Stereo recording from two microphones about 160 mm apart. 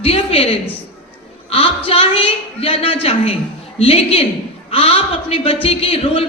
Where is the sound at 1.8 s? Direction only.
35° left (ahead or behind).